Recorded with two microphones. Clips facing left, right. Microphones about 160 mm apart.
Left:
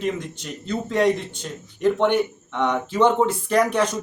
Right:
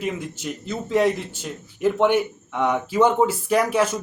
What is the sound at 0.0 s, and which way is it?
Speech, 5° right (ahead or behind).